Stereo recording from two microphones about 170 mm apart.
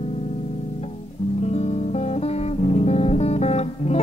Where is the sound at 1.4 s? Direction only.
40° left (ahead or behind).